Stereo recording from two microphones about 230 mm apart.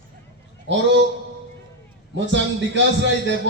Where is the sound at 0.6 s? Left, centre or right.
Right.